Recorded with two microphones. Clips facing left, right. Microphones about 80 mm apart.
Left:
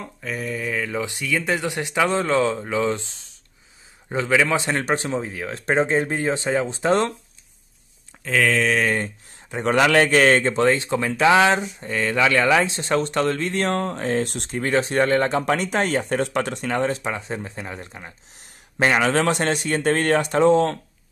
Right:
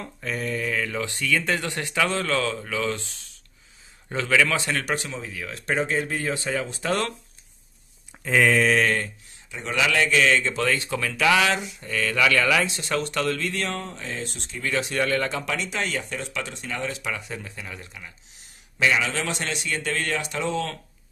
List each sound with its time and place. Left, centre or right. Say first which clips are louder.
0.0 s speech: left 1 dB; centre; by 7.2 s left
8.2 s speech: even; centre
9.5 s speech: left 7 dB; left
14.6 s speech: left 5 dB; left